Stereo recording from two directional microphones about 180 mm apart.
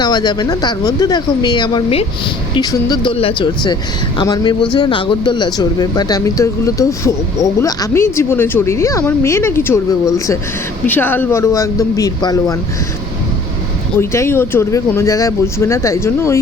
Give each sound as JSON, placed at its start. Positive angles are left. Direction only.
{"t": 0.0, "sound": "speech", "side_deg": 25}
{"t": 14.0, "sound": "speech", "side_deg": 15}